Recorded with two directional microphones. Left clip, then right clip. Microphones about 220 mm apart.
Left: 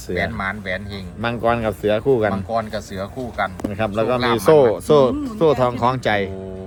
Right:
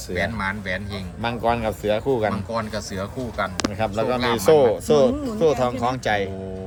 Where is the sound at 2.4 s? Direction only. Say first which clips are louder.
Left 4 dB; centre (ahead or behind).